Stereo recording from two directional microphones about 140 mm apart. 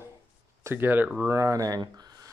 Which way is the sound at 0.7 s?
15° right (ahead or behind).